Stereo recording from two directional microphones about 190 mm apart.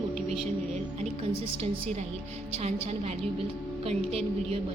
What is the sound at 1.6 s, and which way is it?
Speech, 35° right (ahead or behind).